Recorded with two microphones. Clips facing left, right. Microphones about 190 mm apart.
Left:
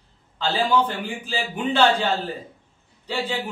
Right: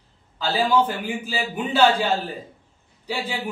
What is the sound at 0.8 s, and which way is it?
Speech, 10° right (ahead or behind).